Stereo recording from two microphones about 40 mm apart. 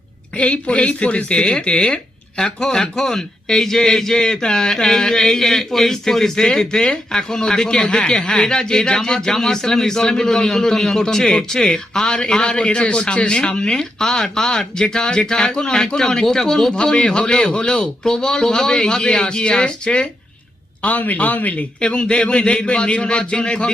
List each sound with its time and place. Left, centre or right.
0.3 s a man's voice: left
20.8 s a man's voice: left
21.8 s speech: left